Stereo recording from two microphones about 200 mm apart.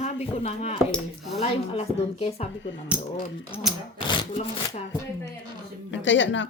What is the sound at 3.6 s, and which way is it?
Speech, centre (ahead or behind).